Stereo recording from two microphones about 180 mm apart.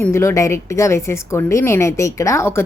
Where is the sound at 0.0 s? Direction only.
15° left (ahead or behind).